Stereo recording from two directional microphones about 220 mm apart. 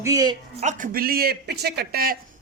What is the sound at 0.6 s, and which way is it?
Speech, 40° right (ahead or behind).